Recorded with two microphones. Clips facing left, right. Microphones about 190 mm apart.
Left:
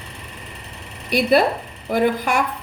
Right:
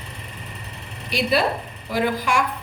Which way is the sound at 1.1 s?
55° left (ahead or behind).